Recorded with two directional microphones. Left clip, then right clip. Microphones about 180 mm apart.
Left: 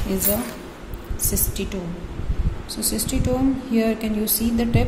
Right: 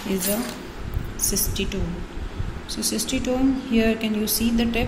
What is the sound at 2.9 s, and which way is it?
A woman's voice, 10° left (ahead or behind).